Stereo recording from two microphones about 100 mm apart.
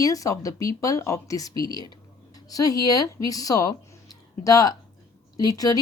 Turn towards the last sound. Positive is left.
turn(degrees=35)  # may be behind; listen again after turning